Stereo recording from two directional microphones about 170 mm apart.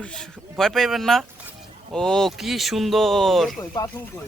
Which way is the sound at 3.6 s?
20° left (ahead or behind).